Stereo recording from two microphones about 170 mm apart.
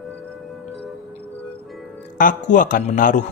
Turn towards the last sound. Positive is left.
turn(degrees=50)  # may be behind; listen again after turning